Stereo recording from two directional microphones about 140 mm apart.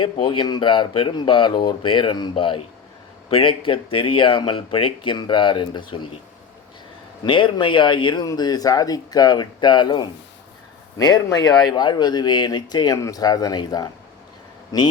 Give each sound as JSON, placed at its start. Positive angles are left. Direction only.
{"t": 0.0, "sound": "speech", "side_deg": 35}
{"t": 7.3, "sound": "speech", "side_deg": 35}